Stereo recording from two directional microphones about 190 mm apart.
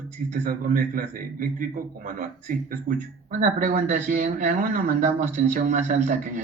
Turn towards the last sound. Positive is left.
turn(degrees=-45)  # may be behind; listen again after turning